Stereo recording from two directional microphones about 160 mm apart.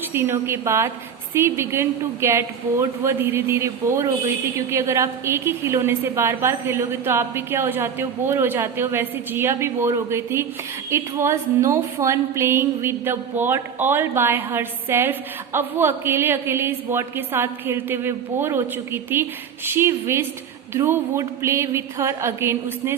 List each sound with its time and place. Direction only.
0.1 s a woman's voice: 15° right (ahead or behind)